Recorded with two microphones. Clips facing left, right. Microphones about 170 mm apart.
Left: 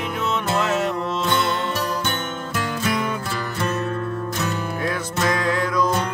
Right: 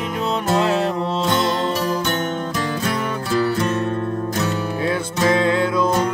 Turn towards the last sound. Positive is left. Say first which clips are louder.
# right 3 dB
turn(degrees=-25)  # may be behind; listen again after turning